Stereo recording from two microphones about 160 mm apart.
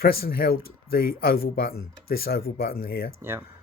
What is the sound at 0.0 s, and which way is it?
Speech, 75° left (ahead or behind).